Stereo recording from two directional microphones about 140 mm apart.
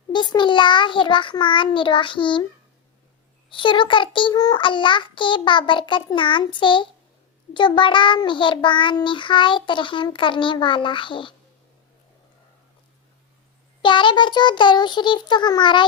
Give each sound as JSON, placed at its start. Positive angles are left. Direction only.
{"t": 0.1, "sound": "child singing", "side_deg": 35}
{"t": 3.5, "sound": "child singing", "side_deg": 35}
{"t": 13.8, "sound": "child singing", "side_deg": 35}